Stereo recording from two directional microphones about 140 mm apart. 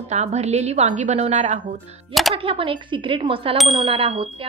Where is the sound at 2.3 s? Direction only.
40° right (ahead or behind).